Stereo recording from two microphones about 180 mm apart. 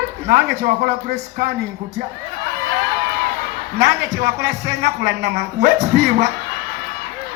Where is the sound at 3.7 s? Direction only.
70° right (ahead or behind).